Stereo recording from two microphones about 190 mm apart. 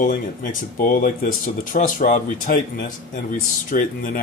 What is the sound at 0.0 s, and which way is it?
A man's voice, 45° left (ahead or behind).